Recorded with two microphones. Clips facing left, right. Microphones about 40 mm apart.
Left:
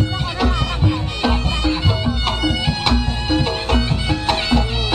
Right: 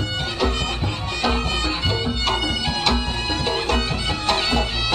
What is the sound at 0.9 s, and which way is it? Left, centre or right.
Music, centre.